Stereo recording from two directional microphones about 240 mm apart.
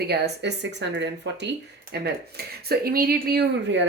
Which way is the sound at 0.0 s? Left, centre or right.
Right.